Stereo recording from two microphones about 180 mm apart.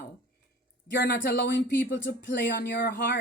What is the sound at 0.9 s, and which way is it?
Speech, 70° left (ahead or behind).